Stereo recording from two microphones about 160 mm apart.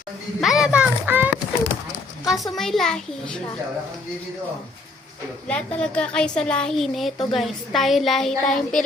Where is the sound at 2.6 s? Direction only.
Centre (ahead or behind).